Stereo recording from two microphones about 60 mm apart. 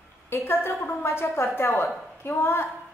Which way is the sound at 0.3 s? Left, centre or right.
Left.